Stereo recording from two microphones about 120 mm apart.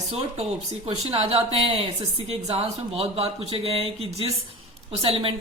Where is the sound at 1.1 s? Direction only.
55° right (ahead or behind).